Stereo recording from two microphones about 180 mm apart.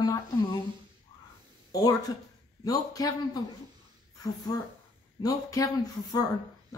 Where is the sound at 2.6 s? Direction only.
20° left (ahead or behind).